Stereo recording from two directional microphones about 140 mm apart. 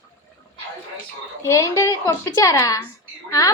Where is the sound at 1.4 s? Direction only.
20° left (ahead or behind).